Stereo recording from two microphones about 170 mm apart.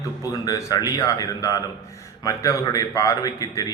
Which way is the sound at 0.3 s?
20° left (ahead or behind).